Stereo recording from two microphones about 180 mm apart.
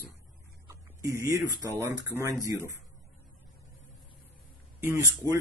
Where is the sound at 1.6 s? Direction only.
15° right (ahead or behind).